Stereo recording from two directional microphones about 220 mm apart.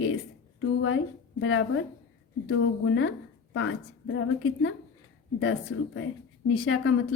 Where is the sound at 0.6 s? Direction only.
65° left (ahead or behind).